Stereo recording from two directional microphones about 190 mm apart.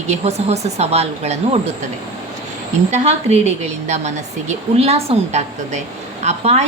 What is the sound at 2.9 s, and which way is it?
A woman's voice, 35° right (ahead or behind).